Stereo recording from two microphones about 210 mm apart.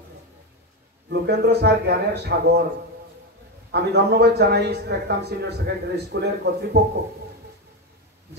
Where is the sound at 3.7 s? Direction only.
50° right (ahead or behind).